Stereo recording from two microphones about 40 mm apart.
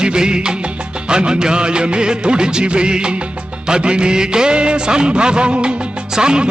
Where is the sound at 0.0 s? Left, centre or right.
Right.